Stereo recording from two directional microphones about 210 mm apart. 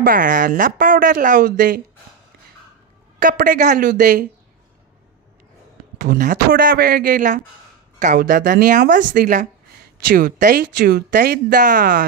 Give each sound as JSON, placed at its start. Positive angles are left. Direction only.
{"t": 0.0, "sound": "speech", "side_deg": -40}
{"t": 3.2, "sound": "speech", "side_deg": -40}
{"t": 5.9, "sound": "speech", "side_deg": -40}